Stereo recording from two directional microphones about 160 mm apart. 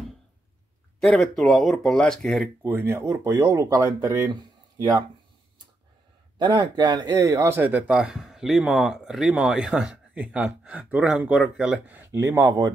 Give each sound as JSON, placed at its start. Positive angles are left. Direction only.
{"t": 1.0, "sound": "speech", "side_deg": 0}
{"t": 2.6, "sound": "speech", "side_deg": -15}
{"t": 6.3, "sound": "speech", "side_deg": -30}